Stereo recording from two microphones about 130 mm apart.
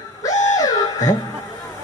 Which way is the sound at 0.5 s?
25° left (ahead or behind).